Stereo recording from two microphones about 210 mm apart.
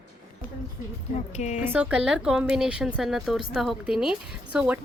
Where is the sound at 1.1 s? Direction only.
35° left (ahead or behind).